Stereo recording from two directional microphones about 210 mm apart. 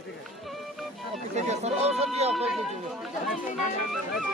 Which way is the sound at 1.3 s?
30° right (ahead or behind).